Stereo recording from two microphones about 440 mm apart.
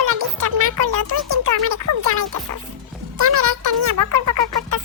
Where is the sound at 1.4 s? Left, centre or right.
Right.